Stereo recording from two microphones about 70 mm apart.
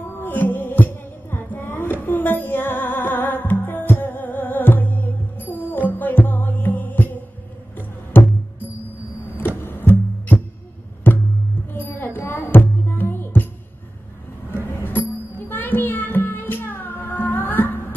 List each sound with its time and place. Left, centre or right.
0.2 s music: left
9.6 s music: left
14.8 s music: left